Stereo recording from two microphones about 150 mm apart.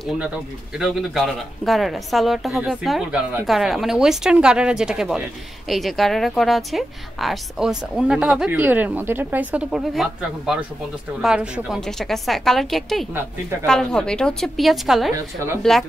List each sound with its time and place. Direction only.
0.0 s a woman's voice: 5° right (ahead or behind)
15.1 s a woman's voice: 15° right (ahead or behind)